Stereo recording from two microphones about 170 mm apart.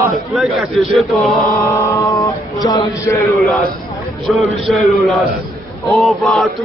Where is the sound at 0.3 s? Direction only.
Centre (ahead or behind).